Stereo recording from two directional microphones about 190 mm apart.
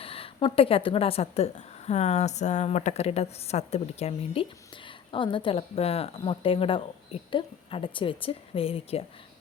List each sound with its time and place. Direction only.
0.0 s speech: 30° left (ahead or behind)